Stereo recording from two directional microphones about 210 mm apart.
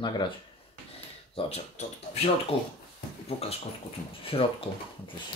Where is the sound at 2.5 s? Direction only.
50° left (ahead or behind).